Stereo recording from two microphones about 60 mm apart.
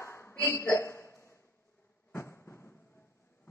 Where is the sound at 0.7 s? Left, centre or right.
Left.